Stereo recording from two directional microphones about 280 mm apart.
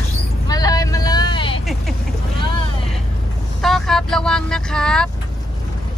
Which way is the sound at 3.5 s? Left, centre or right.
Centre.